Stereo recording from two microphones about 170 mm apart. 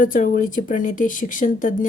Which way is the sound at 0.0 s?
50° left (ahead or behind).